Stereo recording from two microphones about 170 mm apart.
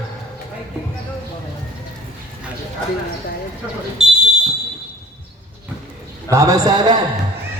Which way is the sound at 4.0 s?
5° right (ahead or behind).